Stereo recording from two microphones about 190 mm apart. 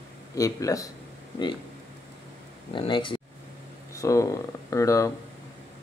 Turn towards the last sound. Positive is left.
turn(degrees=15)  # may be behind; listen again after turning